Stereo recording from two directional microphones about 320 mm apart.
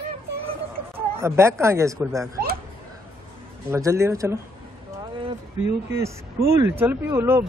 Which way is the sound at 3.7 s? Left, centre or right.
Centre.